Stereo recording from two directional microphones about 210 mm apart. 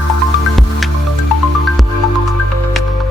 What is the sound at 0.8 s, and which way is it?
Music, centre (ahead or behind).